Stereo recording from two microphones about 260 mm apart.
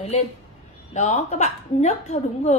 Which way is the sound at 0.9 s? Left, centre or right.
Left.